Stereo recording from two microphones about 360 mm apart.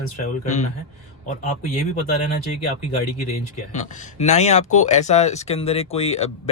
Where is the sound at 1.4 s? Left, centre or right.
Centre.